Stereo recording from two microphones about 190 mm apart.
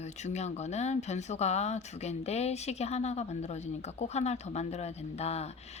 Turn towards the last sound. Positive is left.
turn(degrees=35)  # may be behind; listen again after turning